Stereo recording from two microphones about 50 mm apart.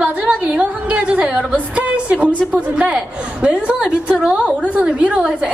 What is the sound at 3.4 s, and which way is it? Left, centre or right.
A woman's voice, right.